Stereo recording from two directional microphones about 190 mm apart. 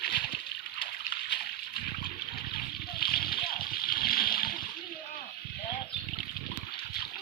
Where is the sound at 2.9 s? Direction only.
55° left (ahead or behind).